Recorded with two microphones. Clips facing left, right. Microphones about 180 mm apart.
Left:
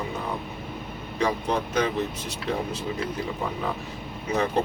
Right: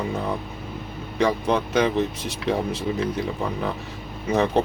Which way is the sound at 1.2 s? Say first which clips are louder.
Right 4 dB; 75° right (ahead or behind).